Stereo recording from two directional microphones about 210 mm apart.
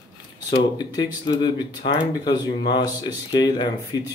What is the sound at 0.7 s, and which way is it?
Speech, 20° left (ahead or behind).